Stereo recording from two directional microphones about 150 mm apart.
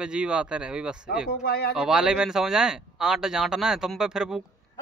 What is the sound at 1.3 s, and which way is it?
Speech, 90° left.